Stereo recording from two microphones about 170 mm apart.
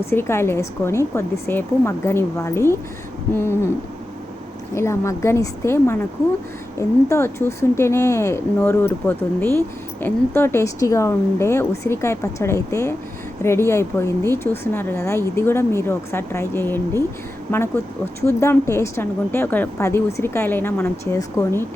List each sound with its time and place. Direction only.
0.1 s speech: 15° left (ahead or behind)
4.7 s speech: 15° left (ahead or behind)